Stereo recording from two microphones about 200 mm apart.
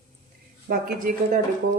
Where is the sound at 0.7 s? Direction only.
40° right (ahead or behind).